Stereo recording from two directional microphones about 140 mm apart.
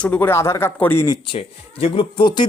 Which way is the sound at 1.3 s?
40° left (ahead or behind).